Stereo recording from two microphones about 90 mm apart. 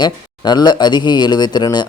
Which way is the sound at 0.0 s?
50° left (ahead or behind).